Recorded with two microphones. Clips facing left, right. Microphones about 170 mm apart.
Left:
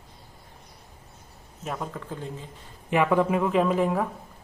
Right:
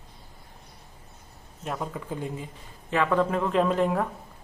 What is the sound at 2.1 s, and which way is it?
Speech, 10° right (ahead or behind).